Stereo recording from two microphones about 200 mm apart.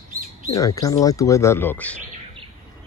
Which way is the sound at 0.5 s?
15° left (ahead or behind).